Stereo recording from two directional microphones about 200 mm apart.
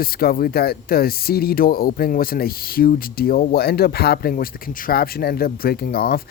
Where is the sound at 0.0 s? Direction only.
50° left (ahead or behind).